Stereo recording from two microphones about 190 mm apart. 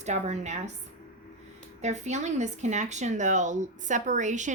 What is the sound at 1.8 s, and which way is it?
A woman's voice, 35° right (ahead or behind).